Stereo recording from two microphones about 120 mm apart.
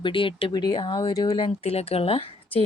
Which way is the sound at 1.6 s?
55° left (ahead or behind).